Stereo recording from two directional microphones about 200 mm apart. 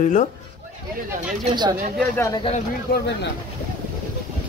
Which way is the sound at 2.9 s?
50° left (ahead or behind).